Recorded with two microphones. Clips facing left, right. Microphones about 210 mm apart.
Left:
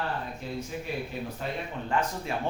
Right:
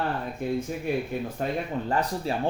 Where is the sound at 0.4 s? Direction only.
55° right (ahead or behind).